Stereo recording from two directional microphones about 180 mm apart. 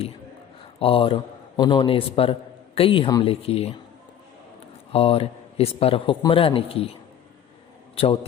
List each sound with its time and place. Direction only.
0.8 s a man's voice: 30° left (ahead or behind)
4.9 s a man's voice: 30° left (ahead or behind)
7.9 s a man's voice: 35° left (ahead or behind)